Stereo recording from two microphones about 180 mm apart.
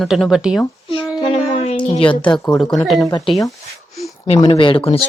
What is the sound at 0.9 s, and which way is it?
A child's voice, 30° left (ahead or behind).